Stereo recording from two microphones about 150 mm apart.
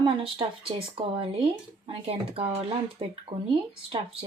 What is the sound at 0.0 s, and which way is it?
Speech, 35° right (ahead or behind).